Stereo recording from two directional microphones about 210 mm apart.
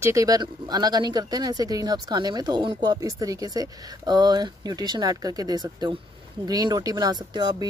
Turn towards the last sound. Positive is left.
turn(degrees=-20)  # may be behind; listen again after turning